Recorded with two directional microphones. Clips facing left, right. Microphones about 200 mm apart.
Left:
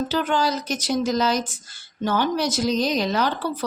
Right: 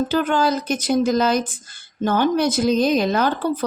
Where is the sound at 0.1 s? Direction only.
55° right (ahead or behind).